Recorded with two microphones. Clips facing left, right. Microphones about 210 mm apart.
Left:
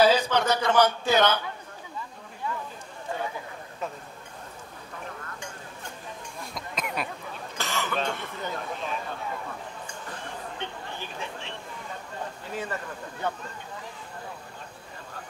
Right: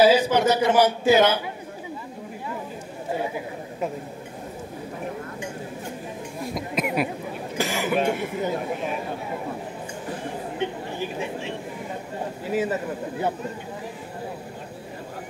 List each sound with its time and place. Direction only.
0.0 s a man's voice: 5° right (ahead or behind)
3.1 s speech: 15° right (ahead or behind)
5.0 s a sound: 20° right (ahead or behind)
6.9 s a man's voice: 15° right (ahead or behind)